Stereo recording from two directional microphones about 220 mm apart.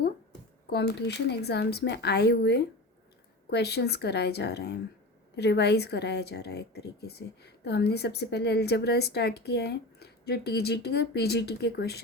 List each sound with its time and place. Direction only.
0.7 s speech: 50° left (ahead or behind)